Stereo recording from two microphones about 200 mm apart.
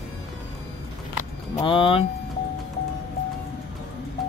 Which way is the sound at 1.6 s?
25° left (ahead or behind).